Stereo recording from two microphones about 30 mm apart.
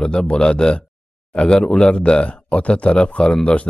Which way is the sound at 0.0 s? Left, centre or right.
Left.